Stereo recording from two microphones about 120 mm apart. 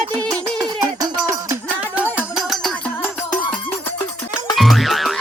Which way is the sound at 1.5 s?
15° right (ahead or behind).